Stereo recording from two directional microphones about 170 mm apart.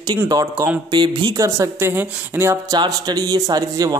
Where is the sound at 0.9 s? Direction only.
25° right (ahead or behind).